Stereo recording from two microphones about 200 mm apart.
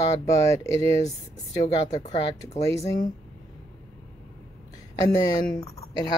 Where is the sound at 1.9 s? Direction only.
35° left (ahead or behind).